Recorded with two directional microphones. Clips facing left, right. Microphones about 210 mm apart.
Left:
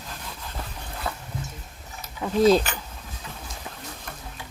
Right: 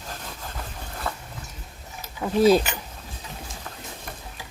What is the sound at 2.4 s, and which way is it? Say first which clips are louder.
Speech: right 1 dB; 5° right (ahead or behind).